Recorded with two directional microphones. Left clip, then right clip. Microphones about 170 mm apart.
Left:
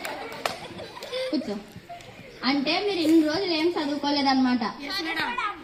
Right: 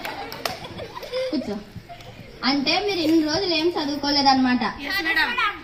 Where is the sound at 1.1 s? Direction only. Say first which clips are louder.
Right 3 dB; centre (ahead or behind).